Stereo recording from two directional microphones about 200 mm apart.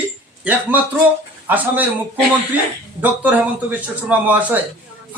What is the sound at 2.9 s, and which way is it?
A man's voice, 10° right (ahead or behind).